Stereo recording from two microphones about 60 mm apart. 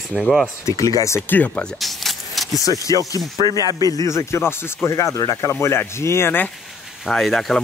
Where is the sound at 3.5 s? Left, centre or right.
Right.